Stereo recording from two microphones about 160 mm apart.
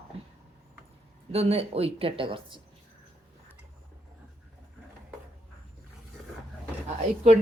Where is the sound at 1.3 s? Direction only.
40° right (ahead or behind).